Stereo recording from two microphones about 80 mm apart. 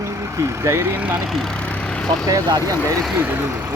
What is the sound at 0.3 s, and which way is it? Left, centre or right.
Speech, right.